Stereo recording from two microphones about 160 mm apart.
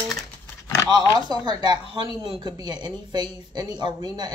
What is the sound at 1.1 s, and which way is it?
A woman's voice, 25° right (ahead or behind).